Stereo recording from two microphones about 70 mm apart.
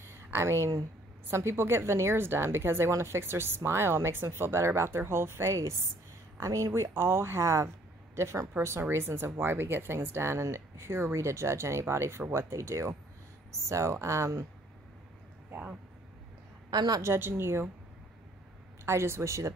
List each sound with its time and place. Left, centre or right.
0.0 s speech: right
16.7 s a woman's voice: right
17.0 s speech: right
18.9 s speech: right